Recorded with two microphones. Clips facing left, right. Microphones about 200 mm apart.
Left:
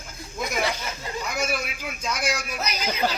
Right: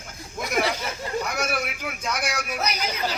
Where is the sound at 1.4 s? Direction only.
65° right (ahead or behind).